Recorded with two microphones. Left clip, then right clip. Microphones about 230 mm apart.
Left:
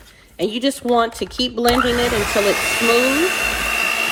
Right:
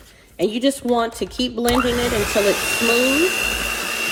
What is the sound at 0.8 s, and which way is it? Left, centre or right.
Speech, centre.